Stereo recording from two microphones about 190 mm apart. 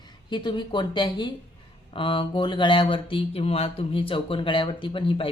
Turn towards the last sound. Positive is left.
turn(degrees=30)  # may be behind; listen again after turning